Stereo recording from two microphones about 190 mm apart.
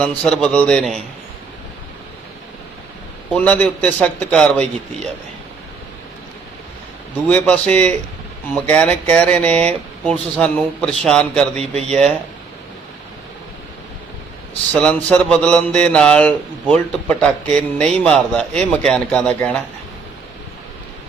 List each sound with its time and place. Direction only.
0.0 s a man's voice: 5° left (ahead or behind)
3.3 s a man's voice: 5° left (ahead or behind)
7.3 s a man's voice: 10° left (ahead or behind)
11.5 s speech: 35° right (ahead or behind)
14.7 s a man's voice: 5° left (ahead or behind)